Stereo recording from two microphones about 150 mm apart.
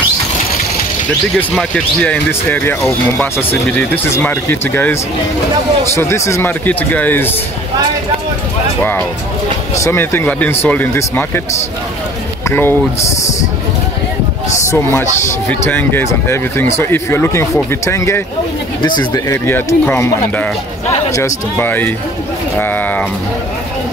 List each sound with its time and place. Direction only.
1.5 s speech: 5° left (ahead or behind)
5.9 s speech: 20° left (ahead or behind)
9.8 s speech: 15° left (ahead or behind)
12.4 s speech: 15° left (ahead or behind)
14.7 s speech: 15° left (ahead or behind)